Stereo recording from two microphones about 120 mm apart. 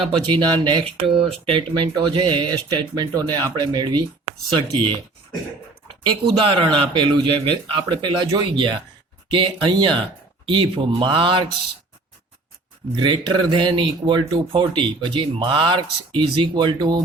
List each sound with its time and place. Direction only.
0.0 s speech: 40° right (ahead or behind)
13.0 s speech: 40° right (ahead or behind)